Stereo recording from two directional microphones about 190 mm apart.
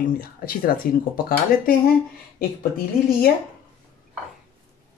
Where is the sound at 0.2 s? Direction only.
50° left (ahead or behind).